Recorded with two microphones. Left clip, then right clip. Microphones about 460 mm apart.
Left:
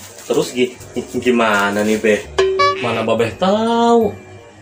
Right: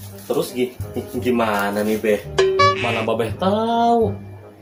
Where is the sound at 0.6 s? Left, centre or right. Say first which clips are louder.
Left 5 dB; right.